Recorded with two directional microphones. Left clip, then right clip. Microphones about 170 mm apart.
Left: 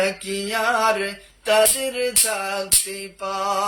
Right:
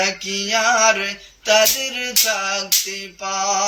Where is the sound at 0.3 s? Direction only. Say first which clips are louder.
Right 4 dB; 30° left (ahead or behind).